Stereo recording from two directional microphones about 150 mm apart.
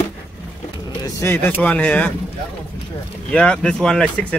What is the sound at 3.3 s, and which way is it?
Speech, 5° left (ahead or behind).